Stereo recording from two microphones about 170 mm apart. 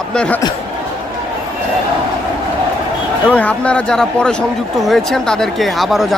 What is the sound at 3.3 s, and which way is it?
Speech, 10° left (ahead or behind).